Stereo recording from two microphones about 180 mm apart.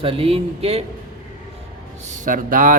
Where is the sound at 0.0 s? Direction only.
30° right (ahead or behind).